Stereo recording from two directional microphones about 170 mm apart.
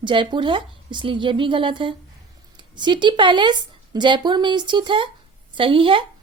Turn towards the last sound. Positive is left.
turn(degrees=-30)  # may be behind; listen again after turning